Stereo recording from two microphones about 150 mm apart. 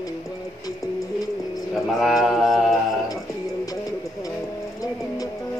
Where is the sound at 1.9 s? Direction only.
Centre (ahead or behind).